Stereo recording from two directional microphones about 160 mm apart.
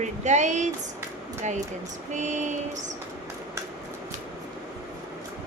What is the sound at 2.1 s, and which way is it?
Speech, 50° right (ahead or behind).